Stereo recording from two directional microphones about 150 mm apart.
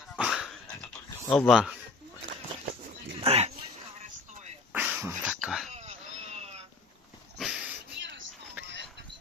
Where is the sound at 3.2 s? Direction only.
40° right (ahead or behind).